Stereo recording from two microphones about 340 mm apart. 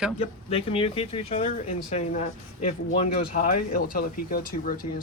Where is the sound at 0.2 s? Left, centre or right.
Centre.